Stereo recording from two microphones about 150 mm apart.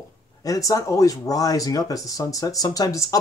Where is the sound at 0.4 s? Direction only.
20° left (ahead or behind).